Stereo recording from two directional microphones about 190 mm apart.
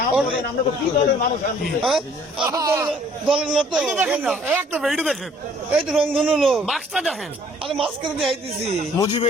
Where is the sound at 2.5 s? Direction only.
15° right (ahead or behind).